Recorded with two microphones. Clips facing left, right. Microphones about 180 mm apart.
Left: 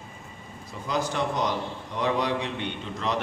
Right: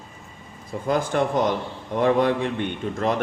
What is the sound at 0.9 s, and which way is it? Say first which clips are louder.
A man's voice: right 6 dB; 50° right (ahead or behind).